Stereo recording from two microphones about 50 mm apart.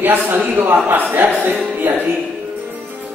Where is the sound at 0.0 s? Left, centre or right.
Right.